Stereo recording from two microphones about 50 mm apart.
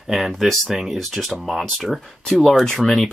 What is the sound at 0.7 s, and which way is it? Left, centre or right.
Speech, centre.